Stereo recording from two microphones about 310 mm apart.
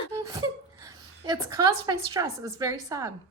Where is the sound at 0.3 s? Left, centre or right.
Centre.